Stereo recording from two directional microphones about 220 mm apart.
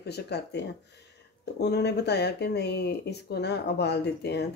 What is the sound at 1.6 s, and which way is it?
Speech, 50° left (ahead or behind).